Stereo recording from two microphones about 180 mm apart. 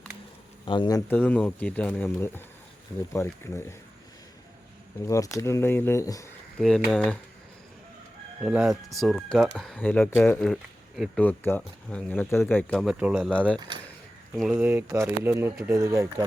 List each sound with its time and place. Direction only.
0.6 s speech: 25° left (ahead or behind)
1.1 s speech: 10° left (ahead or behind)
5.0 s speech: 15° left (ahead or behind)
6.6 s speech: centre (ahead or behind)
8.4 s speech: 5° right (ahead or behind)
11.2 s speech: 10° left (ahead or behind)
12.8 s speech: 5° right (ahead or behind)
14.5 s speech: 10° right (ahead or behind)